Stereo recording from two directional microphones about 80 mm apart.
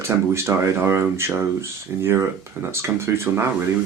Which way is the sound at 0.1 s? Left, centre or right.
Right.